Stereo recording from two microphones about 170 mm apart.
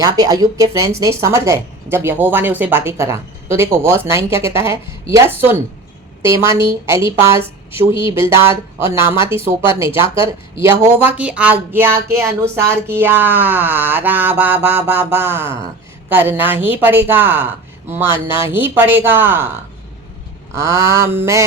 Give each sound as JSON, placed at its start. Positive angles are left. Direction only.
{"t": 0.0, "sound": "speech", "side_deg": -20}
{"t": 20.6, "sound": "speech", "side_deg": -15}